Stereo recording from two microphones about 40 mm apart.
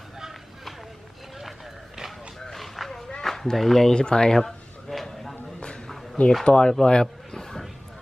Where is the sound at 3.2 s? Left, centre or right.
Centre.